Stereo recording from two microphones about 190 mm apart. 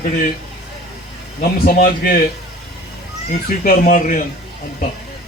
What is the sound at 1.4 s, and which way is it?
Speech, 50° left (ahead or behind).